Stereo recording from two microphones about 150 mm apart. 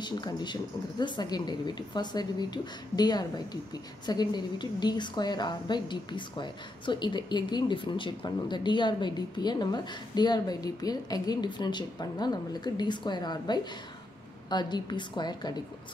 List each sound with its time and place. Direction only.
0.0 s a woman's voice: 30° left (ahead or behind)